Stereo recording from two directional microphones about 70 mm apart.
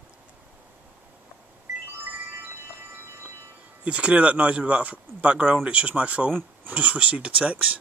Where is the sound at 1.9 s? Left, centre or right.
Right.